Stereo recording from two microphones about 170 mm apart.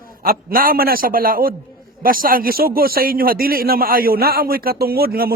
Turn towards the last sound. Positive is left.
turn(degrees=-65)  # may be behind; listen again after turning